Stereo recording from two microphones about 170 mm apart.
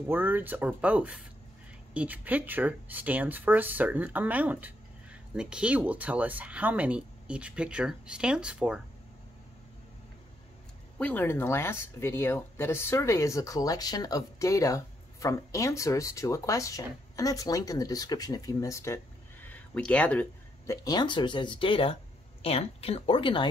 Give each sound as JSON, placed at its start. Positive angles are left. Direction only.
{"t": 0.1, "sound": "speech", "side_deg": -10}
{"t": 11.0, "sound": "speech", "side_deg": 10}
{"t": 19.4, "sound": "a sound", "side_deg": 10}
{"t": 20.6, "sound": "speech", "side_deg": 20}